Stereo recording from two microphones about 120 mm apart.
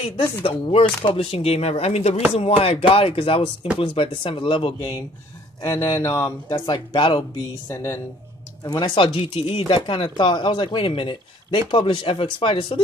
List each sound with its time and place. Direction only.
0.4 s speech: 55° left (ahead or behind)
5.6 s speech: 25° left (ahead or behind)
6.6 s speech: 35° left (ahead or behind)
7.6 s speech: 20° left (ahead or behind)
8.6 s speech: 40° left (ahead or behind)